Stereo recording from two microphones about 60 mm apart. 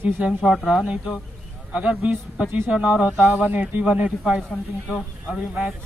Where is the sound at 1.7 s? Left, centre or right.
Right.